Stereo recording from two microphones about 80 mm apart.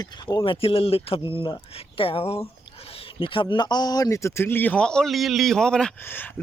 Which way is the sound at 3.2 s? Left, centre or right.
Left.